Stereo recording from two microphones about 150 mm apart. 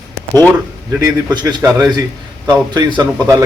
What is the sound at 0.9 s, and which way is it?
Speech, 25° right (ahead or behind).